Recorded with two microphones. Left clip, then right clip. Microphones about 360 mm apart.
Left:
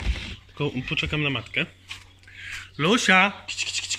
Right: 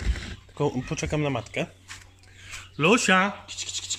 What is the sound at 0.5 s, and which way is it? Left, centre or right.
Speech, centre.